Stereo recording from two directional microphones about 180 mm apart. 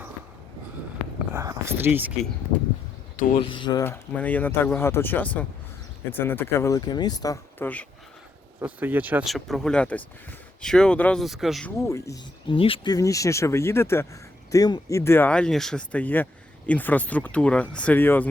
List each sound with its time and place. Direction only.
1.3 s speech: 15° right (ahead or behind)
3.4 s speech: 25° left (ahead or behind)
4.1 s speech: 10° left (ahead or behind)
8.6 s speech: 10° right (ahead or behind)
11.8 s speech: 15° left (ahead or behind)
12.5 s speech: 30° left (ahead or behind); by 18.3 s 10° left (ahead or behind)